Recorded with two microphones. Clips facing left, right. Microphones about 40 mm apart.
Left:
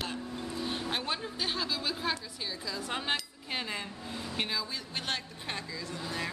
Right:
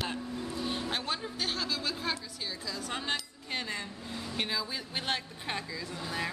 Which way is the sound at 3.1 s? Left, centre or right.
Centre.